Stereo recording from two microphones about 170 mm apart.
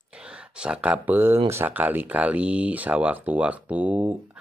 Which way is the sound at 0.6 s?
5° right (ahead or behind).